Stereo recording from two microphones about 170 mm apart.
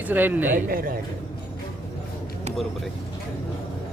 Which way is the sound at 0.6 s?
55° right (ahead or behind).